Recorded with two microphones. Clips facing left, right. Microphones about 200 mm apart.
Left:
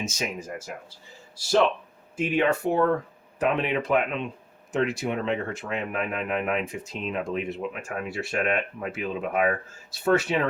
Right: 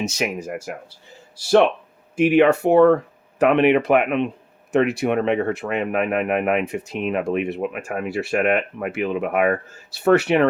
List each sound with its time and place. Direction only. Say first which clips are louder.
0.0 s speech: right 7 dB; 70° right (ahead or behind)
2.1 s speech: right 9 dB; 70° right (ahead or behind)